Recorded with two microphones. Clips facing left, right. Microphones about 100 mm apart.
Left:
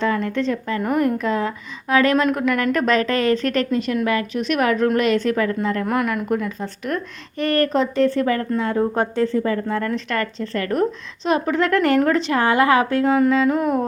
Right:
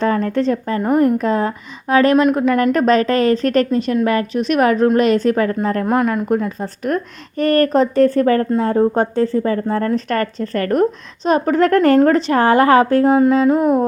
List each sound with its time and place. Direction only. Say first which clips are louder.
0.0 s speech: right 4 dB; 40° right (ahead or behind)
0.8 s music: right 5 dB; 30° right (ahead or behind)
1.2 s speech: right 4 dB; 40° right (ahead or behind)
2.1 s music: right 5 dB; 20° right (ahead or behind)
2.4 s speech: right 5 dB; 30° right (ahead or behind)
5.8 s music: right 5 dB; 25° right (ahead or behind)
6.2 s speech: right 4 dB; 40° right (ahead or behind)
13.1 s music: right 4 dB; 25° right (ahead or behind)